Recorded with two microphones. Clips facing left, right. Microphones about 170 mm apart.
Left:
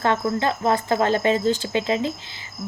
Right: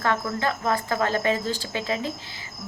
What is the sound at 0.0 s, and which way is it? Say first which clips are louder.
A woman's voice: left 4 dB; 25° left (ahead or behind).